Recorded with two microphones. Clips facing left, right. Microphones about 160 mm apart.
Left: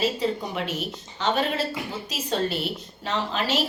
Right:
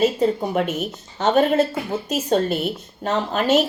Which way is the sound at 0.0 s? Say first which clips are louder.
Right 7 dB; 50° right (ahead or behind).